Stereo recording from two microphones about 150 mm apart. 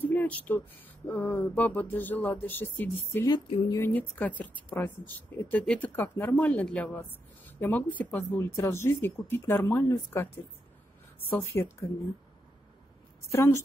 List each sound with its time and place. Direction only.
0.0 s speech: 10° left (ahead or behind)
3.3 s speech: 30° left (ahead or behind)
3.8 s speech: 10° left (ahead or behind)
13.3 s speech: 20° left (ahead or behind)